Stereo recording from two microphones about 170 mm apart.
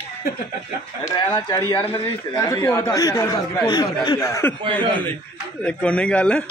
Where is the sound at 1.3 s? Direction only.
15° left (ahead or behind).